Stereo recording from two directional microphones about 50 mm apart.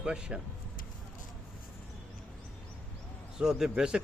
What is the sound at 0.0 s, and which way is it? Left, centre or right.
Speech, centre.